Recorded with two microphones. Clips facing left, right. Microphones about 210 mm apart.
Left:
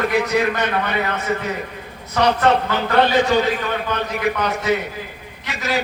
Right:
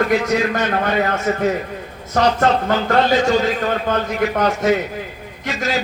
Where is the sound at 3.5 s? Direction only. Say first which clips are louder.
Right 4 dB; 50° right (ahead or behind).